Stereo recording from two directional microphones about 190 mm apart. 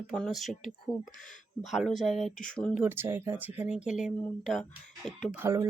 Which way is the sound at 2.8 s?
10° right (ahead or behind).